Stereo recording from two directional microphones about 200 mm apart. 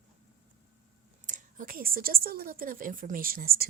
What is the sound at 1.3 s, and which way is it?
Speech, 40° right (ahead or behind).